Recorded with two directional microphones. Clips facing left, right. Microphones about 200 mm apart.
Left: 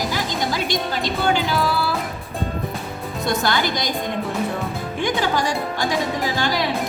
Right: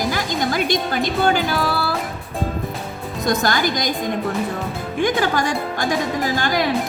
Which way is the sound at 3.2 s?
45° right (ahead or behind).